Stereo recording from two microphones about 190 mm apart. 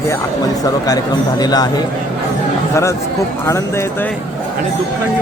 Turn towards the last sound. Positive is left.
turn(degrees=15)  # may be behind; listen again after turning